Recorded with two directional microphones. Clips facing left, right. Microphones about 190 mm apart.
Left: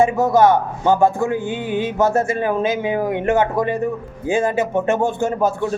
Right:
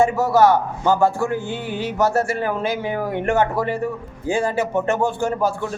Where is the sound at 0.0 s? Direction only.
20° left (ahead or behind).